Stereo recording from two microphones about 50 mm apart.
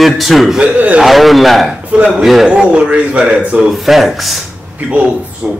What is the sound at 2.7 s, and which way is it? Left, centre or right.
Speech, right.